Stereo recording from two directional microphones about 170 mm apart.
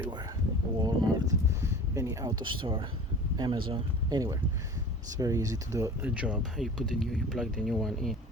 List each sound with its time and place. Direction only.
0.9 s speech: 20° right (ahead or behind)
6.0 s speech: 5° right (ahead or behind)